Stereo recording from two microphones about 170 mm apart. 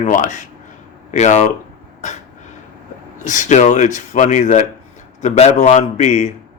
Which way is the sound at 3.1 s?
45° left (ahead or behind).